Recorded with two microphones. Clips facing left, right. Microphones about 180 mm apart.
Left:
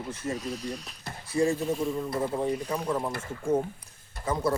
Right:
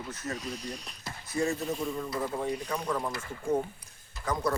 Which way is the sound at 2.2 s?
30° left (ahead or behind).